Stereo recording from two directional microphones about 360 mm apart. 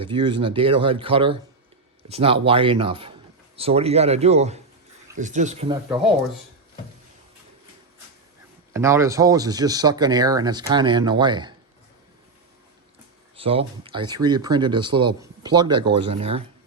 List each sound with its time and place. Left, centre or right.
0.0 s speech: centre
8.7 s speech: centre
13.3 s speech: centre